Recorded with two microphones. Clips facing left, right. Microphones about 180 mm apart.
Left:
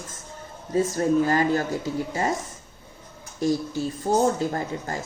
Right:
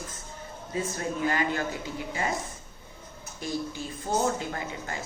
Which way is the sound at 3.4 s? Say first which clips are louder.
Left 9 dB; 40° left (ahead or behind).